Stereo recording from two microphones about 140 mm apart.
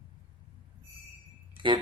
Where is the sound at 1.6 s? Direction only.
35° right (ahead or behind).